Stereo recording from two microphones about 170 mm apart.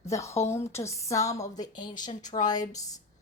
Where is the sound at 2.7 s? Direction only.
20° left (ahead or behind).